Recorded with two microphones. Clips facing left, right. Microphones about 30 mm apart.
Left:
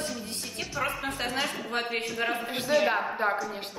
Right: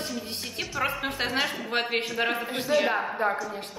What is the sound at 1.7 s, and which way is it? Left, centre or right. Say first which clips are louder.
Speech: right 4 dB; right.